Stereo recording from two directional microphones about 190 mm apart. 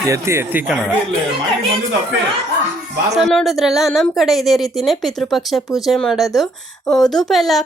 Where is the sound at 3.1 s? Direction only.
Centre (ahead or behind).